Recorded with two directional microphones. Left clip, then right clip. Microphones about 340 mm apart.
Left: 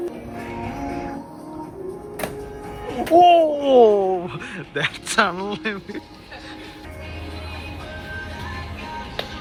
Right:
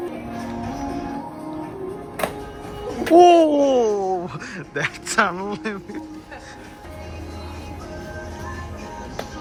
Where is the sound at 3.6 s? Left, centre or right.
Centre.